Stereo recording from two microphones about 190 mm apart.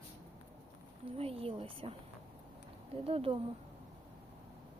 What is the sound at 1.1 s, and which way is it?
Speech, 30° right (ahead or behind).